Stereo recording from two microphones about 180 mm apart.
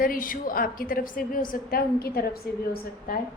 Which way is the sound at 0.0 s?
50° left (ahead or behind).